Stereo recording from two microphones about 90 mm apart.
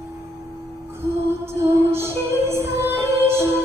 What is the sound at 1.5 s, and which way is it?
Music, 30° right (ahead or behind).